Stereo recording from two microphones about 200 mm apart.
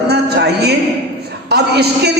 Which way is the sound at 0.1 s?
55° right (ahead or behind).